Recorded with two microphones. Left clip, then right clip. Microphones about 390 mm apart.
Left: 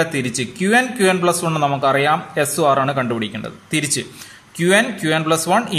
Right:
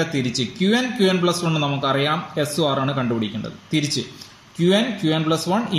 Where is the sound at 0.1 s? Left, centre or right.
Left.